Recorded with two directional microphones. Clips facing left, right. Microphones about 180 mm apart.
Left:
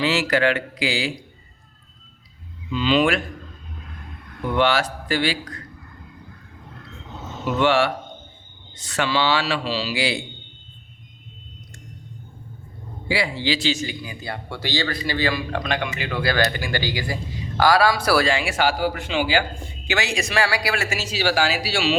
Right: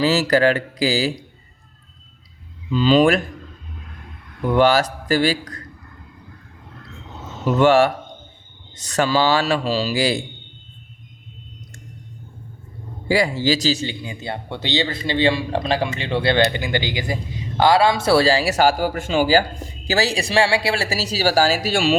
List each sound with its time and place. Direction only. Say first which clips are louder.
0.0 s speech: right 4 dB; 40° right (ahead or behind)
2.7 s speech: right 5 dB; 40° right (ahead or behind)
4.5 s speech: right 4 dB; 40° right (ahead or behind)
7.4 s a man's voice: right 5 dB; 45° right (ahead or behind)
13.1 s speech: right 5 dB; 45° right (ahead or behind)